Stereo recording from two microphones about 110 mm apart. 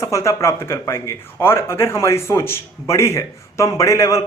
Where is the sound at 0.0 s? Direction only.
30° left (ahead or behind).